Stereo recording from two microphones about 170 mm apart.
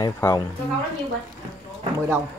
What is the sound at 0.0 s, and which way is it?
Speech, 20° left (ahead or behind).